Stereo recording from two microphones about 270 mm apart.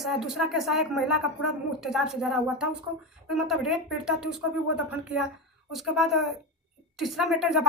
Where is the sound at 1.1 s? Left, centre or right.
Left.